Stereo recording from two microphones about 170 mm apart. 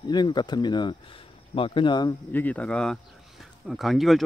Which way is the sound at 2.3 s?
10° left (ahead or behind).